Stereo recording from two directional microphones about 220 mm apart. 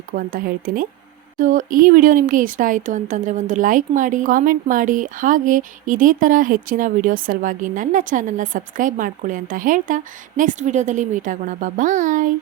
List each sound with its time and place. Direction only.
0.1 s speech: 40° right (ahead or behind)